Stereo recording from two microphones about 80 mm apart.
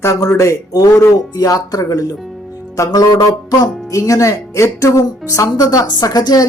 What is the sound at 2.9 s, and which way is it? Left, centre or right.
Music, left.